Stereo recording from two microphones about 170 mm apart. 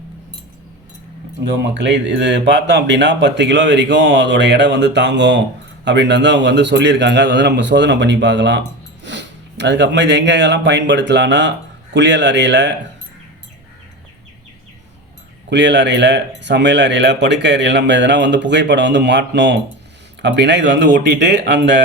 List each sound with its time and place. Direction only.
1.7 s speech: 90° right
15.4 s speech: 90° right